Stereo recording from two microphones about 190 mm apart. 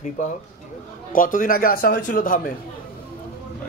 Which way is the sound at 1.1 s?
45° left (ahead or behind).